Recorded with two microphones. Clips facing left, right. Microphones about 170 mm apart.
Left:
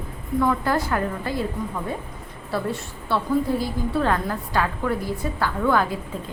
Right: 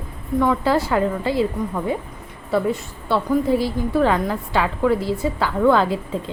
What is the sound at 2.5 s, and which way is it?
A woman's voice, 20° right (ahead or behind).